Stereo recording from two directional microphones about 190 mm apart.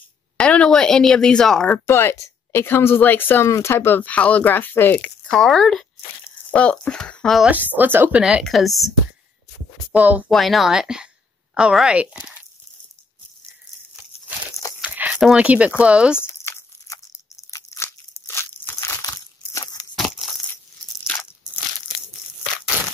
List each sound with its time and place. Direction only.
0.4 s speech: 5° left (ahead or behind)
9.9 s speech: 10° right (ahead or behind)
14.8 s a sound: 5° right (ahead or behind)
15.8 s speech: 5° right (ahead or behind)
16.2 s crumpling: 15° left (ahead or behind)
19.5 s a sound: 20° left (ahead or behind)
20.0 s crushing: centre (ahead or behind)